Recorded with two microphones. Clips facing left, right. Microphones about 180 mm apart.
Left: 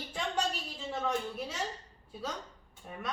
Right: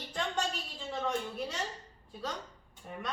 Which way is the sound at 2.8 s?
Centre (ahead or behind).